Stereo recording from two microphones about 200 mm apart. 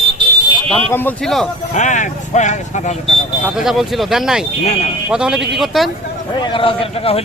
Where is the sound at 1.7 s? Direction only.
35° left (ahead or behind).